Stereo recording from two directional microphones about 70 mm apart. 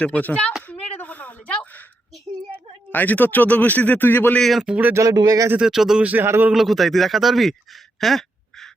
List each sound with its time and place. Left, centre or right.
0.0 s speech: left
0.7 s a sound: left
2.9 s speech: left
4.4 s speech: centre
4.6 s speech: centre
5.1 s speech: right
5.5 s speech: centre
6.0 s speech: right
6.2 s speech: right
6.5 s speech: centre
8.0 s a sound: centre